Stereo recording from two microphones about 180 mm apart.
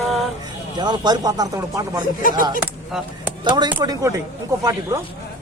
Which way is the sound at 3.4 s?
25° right (ahead or behind).